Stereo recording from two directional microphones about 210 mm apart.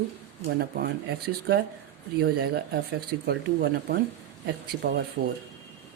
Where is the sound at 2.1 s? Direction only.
50° right (ahead or behind).